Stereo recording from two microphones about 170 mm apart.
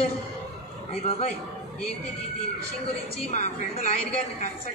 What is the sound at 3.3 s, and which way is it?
A woman's voice, 45° left (ahead or behind).